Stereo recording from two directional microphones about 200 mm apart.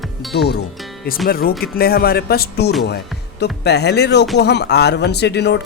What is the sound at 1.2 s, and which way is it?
Speech, 50° left (ahead or behind).